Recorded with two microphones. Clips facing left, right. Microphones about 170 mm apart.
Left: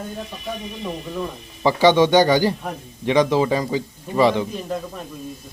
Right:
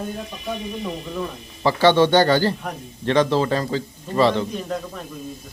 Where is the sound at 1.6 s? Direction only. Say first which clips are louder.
Left 1 dB; 15° left (ahead or behind).